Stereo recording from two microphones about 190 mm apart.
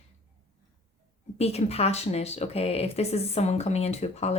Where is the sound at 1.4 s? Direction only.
35° left (ahead or behind).